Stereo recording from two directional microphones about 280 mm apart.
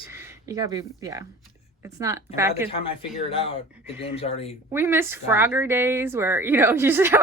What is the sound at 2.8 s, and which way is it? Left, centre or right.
Speech, centre.